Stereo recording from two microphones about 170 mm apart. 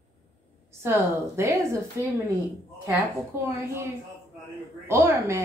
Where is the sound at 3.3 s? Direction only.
15° right (ahead or behind).